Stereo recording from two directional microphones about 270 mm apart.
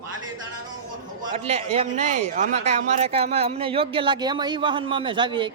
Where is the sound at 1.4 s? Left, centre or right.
Right.